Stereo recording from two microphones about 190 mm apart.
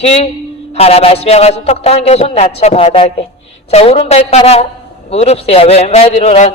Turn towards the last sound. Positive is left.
turn(degrees=35)  # may be behind; listen again after turning